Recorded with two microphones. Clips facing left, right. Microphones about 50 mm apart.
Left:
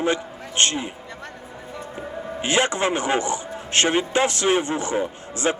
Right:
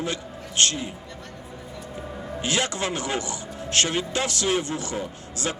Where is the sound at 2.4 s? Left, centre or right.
Left.